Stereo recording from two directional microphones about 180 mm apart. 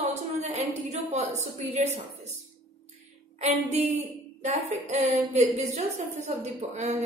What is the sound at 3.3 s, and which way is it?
A woman's voice, 40° right (ahead or behind).